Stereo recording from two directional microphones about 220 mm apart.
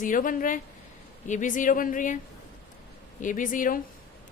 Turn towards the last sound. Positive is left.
turn(degrees=40)  # may be behind; listen again after turning